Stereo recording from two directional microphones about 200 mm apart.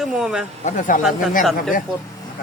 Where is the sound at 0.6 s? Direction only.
40° left (ahead or behind).